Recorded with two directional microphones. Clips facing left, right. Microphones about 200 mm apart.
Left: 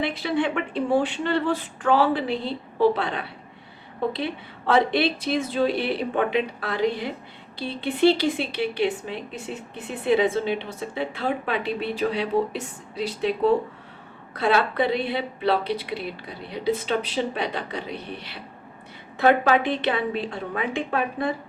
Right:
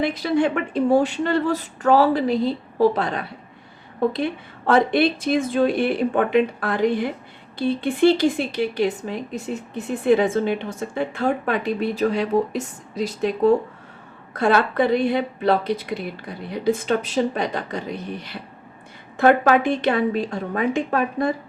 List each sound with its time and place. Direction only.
0.0 s a woman's voice: 40° right (ahead or behind)